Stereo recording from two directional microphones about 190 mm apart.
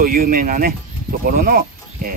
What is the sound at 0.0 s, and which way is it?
Speech, 50° right (ahead or behind).